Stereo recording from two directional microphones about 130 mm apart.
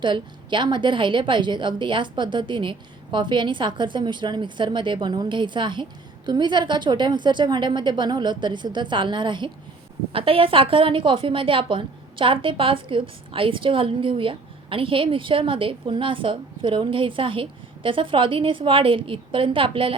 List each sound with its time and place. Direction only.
0.0 s a woman's voice: 35° right (ahead or behind)